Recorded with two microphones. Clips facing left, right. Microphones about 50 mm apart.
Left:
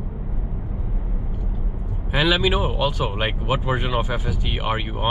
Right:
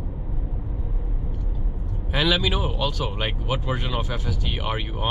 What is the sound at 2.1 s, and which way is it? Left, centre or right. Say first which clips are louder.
Speech: left 3 dB; centre.